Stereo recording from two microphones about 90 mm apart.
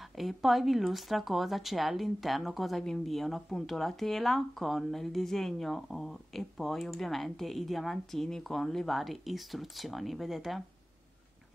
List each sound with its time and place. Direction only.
0.2 s speech: centre (ahead or behind)